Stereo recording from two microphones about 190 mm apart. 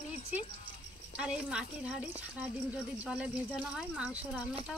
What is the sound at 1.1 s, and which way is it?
Speech, 5° right (ahead or behind).